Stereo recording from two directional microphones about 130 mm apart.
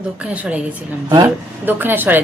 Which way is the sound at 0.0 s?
10° right (ahead or behind).